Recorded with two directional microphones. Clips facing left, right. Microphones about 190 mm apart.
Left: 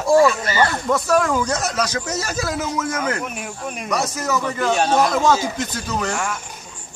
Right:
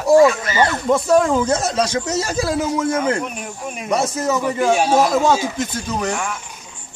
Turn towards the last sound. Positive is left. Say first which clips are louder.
# right 1 dB
turn(degrees=0)  # may be behind; listen again after turning